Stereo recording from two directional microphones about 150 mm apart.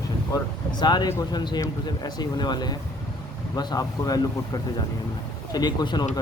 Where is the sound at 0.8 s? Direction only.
25° left (ahead or behind).